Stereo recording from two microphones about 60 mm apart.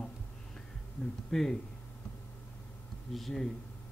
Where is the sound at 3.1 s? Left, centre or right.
Centre.